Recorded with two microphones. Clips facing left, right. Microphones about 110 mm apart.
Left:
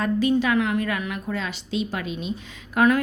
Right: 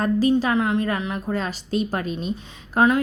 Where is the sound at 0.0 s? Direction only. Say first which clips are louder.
Right 2 dB; 35° right (ahead or behind).